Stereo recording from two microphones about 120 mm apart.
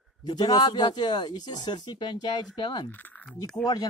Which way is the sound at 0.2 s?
35° left (ahead or behind).